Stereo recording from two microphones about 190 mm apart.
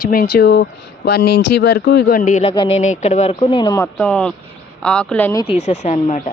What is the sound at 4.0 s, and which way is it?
Speech, 5° left (ahead or behind).